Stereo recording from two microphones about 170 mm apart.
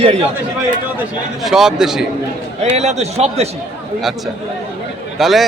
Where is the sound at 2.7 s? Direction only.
40° right (ahead or behind).